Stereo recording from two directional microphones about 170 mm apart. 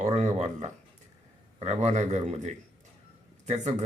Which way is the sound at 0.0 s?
45° right (ahead or behind).